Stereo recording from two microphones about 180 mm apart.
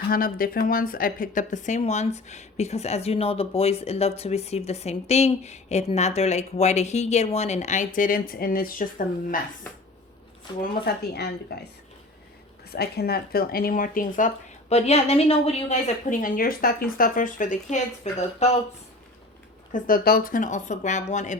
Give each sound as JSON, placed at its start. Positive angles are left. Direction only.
{"t": 0.1, "sound": "speech", "side_deg": 55}
{"t": 10.6, "sound": "speech", "side_deg": 60}
{"t": 12.7, "sound": "speech", "side_deg": 60}
{"t": 19.7, "sound": "speech", "side_deg": 55}